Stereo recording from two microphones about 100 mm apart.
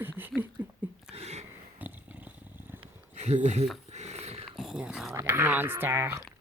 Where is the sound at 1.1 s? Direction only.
90° right.